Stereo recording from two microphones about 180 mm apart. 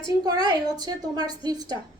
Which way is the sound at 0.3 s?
20° right (ahead or behind).